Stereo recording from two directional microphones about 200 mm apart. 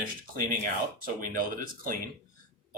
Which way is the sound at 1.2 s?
45° right (ahead or behind).